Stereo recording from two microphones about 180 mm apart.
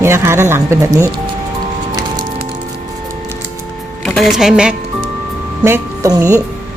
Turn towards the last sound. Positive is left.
turn(degrees=-15)  # may be behind; listen again after turning